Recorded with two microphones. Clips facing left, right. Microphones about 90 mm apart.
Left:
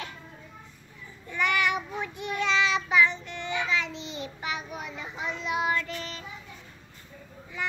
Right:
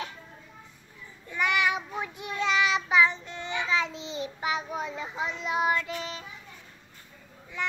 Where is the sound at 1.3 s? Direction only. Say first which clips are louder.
Even; 15° right (ahead or behind).